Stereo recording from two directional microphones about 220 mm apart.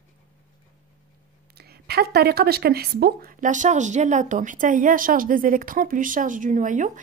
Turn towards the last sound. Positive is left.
turn(degrees=-35)  # may be behind; listen again after turning